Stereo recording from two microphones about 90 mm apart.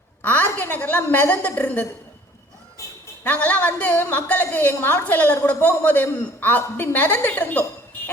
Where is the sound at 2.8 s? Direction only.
35° left (ahead or behind).